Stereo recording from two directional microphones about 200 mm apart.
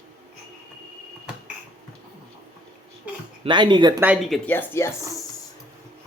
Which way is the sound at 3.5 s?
25° right (ahead or behind).